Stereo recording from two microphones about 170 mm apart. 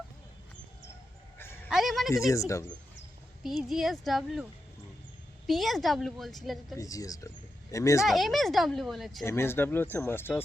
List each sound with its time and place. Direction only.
1.4 s a sound: 15° left (ahead or behind)
1.7 s a woman's voice: centre (ahead or behind)
2.1 s speech: 20° left (ahead or behind)
3.4 s a woman's voice: centre (ahead or behind)
5.5 s a woman's voice: centre (ahead or behind)
6.7 s speech: 20° left (ahead or behind)
8.0 s a woman's voice: centre (ahead or behind)
9.2 s speech: 15° left (ahead or behind)